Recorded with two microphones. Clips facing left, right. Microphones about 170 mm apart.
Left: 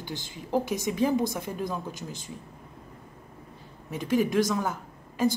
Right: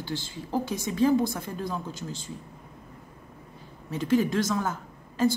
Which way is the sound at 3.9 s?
15° left (ahead or behind).